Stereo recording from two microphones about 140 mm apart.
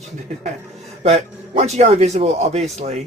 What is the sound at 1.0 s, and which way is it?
A man's voice, 50° right (ahead or behind).